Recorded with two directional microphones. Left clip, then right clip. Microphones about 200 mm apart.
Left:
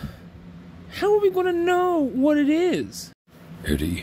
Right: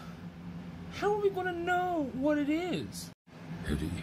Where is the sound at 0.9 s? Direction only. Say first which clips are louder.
Left 10 dB; 45° left (ahead or behind).